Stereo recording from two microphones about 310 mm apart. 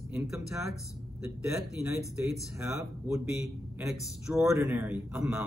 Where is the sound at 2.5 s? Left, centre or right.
Centre.